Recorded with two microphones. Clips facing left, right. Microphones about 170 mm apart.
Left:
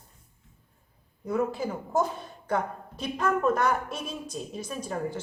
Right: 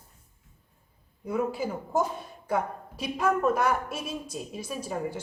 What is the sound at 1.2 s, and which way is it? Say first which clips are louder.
A woman's voice: left 1 dB; 5° right (ahead or behind).